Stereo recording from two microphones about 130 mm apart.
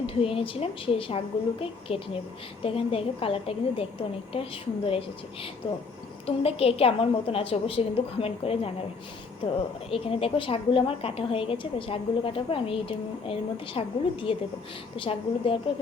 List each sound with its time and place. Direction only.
0.0 s a woman's voice: 45° left (ahead or behind)
9.9 s a woman's voice: 45° left (ahead or behind)